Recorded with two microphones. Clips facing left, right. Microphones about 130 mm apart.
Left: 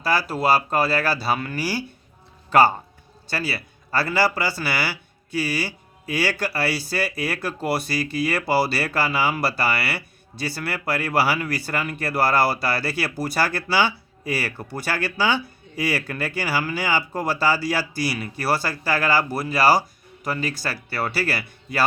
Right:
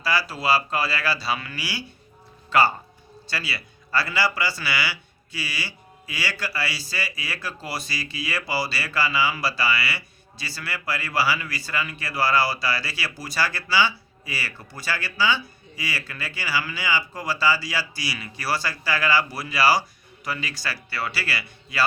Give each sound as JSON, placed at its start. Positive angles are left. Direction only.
{"t": 0.0, "sound": "a man's voice", "side_deg": 50}